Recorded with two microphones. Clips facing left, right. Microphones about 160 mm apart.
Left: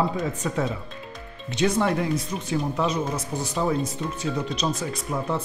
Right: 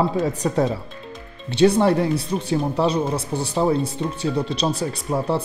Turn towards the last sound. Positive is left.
turn(degrees=-30)  # may be behind; listen again after turning